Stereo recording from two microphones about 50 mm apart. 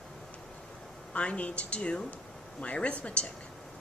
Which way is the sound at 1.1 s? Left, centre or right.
Left.